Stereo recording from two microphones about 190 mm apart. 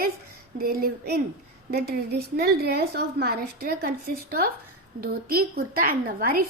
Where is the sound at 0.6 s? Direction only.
50° right (ahead or behind).